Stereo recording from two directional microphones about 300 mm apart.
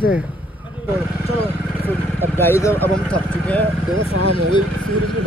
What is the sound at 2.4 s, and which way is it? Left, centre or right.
Speech, centre.